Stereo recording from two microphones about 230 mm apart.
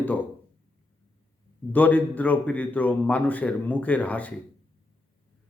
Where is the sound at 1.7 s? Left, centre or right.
Centre.